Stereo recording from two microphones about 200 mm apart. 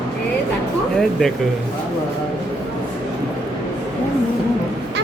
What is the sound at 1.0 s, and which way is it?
Speech, centre (ahead or behind).